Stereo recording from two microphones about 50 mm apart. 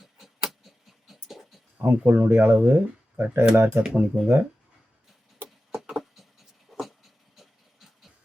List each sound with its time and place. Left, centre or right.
0.0 s a sound: centre
1.8 s speech: right
3.9 s speech: right
5.9 s writing: centre
6.7 s dog: centre